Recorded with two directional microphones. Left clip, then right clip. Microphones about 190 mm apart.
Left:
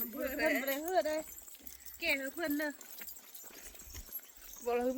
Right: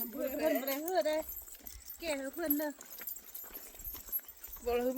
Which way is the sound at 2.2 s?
30° left (ahead or behind).